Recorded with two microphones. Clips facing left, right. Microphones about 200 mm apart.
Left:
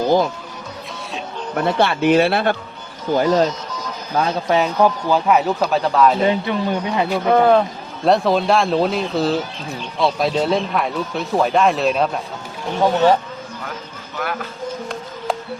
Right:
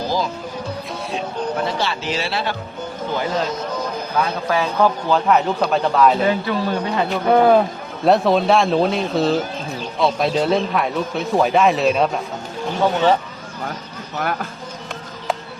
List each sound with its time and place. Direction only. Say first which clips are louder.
1.6 s speech: left 7 dB; 55° left (ahead or behind)
4.1 s a man's voice: left 4 dB; 25° left (ahead or behind); by 6.1 s centre (ahead or behind)
6.2 s speech: left 1 dB; 20° left (ahead or behind)
7.1 s speech: even; 5° right (ahead or behind)
14.2 s speech: right 1 dB; 45° right (ahead or behind)